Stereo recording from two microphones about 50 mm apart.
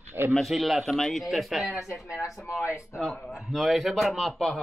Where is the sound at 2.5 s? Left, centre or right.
Left.